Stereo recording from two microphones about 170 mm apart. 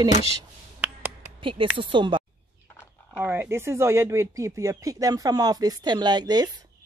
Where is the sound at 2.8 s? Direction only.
10° right (ahead or behind).